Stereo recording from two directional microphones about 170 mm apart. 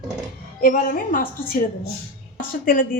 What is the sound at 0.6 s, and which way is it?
Speech, 55° left (ahead or behind).